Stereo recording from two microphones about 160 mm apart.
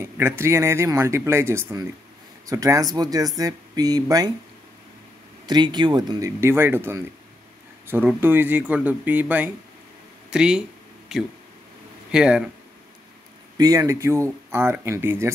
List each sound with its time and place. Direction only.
0.0 s speech: 15° right (ahead or behind)
5.5 s speech: 25° right (ahead or behind); by 10.6 s 5° right (ahead or behind)
12.1 s speech: 5° right (ahead or behind)
13.6 s speech: 20° right (ahead or behind)